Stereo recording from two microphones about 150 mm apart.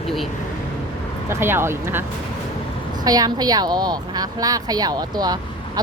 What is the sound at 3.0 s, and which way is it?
A woman's voice, 25° right (ahead or behind).